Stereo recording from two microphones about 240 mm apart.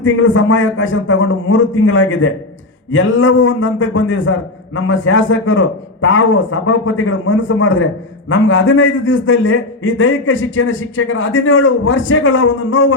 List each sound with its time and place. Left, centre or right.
0.0 s a man's voice: left